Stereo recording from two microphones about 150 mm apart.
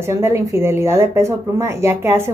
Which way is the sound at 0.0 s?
15° right (ahead or behind).